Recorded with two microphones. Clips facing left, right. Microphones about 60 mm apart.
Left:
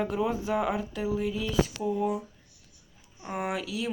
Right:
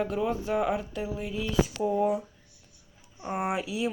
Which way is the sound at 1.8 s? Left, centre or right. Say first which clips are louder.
Right 3 dB; right.